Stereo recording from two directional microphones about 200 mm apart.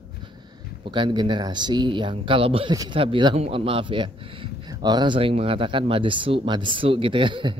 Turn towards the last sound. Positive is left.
turn(degrees=-25)  # may be behind; listen again after turning